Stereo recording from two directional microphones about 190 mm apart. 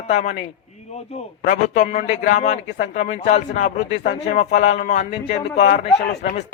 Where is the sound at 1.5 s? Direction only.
40° left (ahead or behind).